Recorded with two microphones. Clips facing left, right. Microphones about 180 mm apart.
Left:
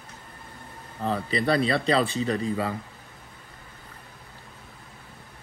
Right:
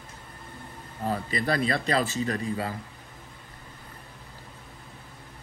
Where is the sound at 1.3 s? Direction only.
30° left (ahead or behind).